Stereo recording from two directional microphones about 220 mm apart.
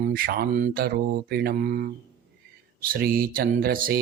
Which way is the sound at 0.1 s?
40° right (ahead or behind).